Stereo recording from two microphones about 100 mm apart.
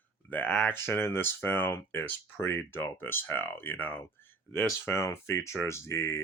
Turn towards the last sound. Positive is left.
turn(degrees=25)  # may be behind; listen again after turning